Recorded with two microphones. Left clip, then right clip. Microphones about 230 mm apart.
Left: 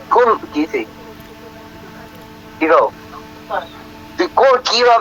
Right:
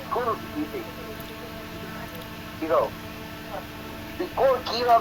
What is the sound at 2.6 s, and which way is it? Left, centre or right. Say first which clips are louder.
Speech: left 11 dB; left.